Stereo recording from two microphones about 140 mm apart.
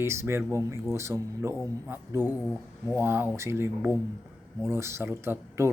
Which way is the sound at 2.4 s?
5° left (ahead or behind).